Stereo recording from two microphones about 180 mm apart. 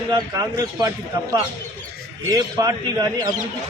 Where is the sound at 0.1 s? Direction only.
20° right (ahead or behind).